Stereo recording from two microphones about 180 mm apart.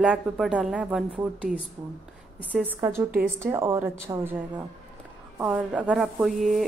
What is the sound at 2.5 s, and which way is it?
A woman's voice, 10° right (ahead or behind).